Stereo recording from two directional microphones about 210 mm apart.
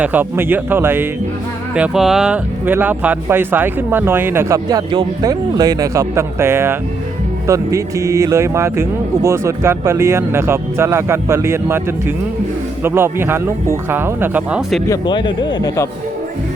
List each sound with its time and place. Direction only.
0.0 s speech: 10° right (ahead or behind)
14.8 s a man's voice: 20° left (ahead or behind)